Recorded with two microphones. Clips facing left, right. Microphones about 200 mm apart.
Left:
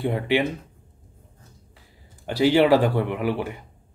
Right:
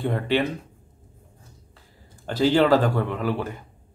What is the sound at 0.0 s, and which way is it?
Speech, 15° left (ahead or behind).